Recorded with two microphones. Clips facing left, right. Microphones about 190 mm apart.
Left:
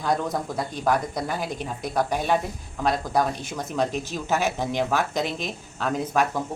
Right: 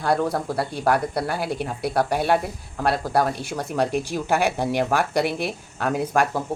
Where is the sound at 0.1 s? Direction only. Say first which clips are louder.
Right 4 dB; 65° right (ahead or behind).